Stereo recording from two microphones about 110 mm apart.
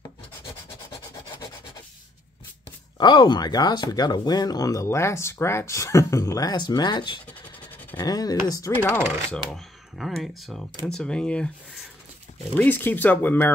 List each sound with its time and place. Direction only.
3.0 s speech: 45° left (ahead or behind)
7.2 s a sound: 15° left (ahead or behind)
8.0 s speech: 35° left (ahead or behind)
8.9 s speech: 10° left (ahead or behind)
12.5 s speech: 20° left (ahead or behind)